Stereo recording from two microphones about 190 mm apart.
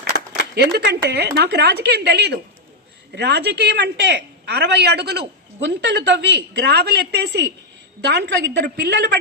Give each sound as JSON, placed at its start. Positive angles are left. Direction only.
{"t": 0.5, "sound": "a woman's voice", "side_deg": -60}